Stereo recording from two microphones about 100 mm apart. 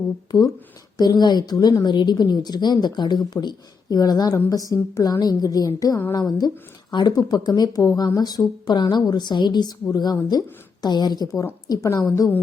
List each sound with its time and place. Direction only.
0.3 s a woman's voice: 40° left (ahead or behind)